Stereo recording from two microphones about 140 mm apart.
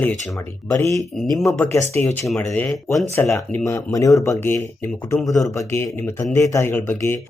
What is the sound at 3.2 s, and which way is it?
Speech, 20° left (ahead or behind).